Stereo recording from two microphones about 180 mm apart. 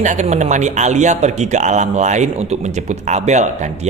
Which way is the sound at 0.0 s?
40° right (ahead or behind).